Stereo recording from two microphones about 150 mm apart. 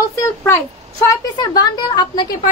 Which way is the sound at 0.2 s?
20° left (ahead or behind).